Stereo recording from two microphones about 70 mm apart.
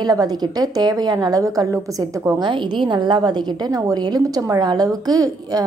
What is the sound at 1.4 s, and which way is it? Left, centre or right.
Speech, right.